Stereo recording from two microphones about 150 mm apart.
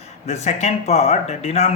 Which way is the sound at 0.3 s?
50° left (ahead or behind).